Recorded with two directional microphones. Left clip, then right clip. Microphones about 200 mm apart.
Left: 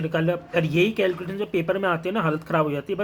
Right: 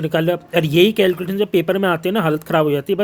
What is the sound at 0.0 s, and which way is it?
Speech, 40° right (ahead or behind).